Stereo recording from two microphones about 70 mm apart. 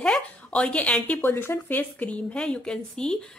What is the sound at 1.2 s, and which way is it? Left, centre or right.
Speech, left.